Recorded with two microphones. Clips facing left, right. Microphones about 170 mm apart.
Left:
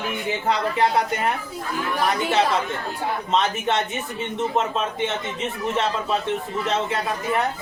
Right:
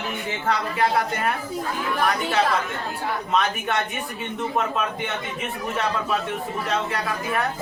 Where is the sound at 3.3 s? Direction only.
25° left (ahead or behind).